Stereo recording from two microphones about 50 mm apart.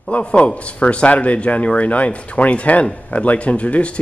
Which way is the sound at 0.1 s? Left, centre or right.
Left.